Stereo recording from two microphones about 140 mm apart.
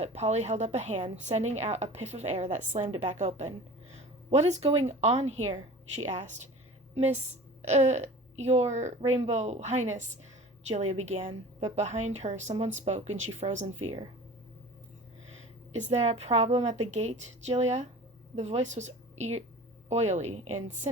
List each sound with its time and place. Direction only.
0.0 s a woman's voice: 50° right (ahead or behind)
15.7 s a woman's voice: 50° right (ahead or behind)